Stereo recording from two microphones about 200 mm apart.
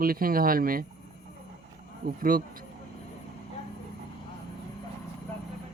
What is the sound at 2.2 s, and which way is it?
Speech, 45° right (ahead or behind).